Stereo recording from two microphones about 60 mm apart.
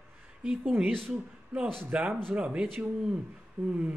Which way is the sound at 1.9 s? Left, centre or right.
Right.